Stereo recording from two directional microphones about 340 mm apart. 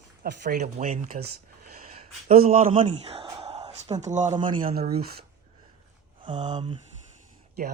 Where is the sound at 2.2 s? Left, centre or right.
Right.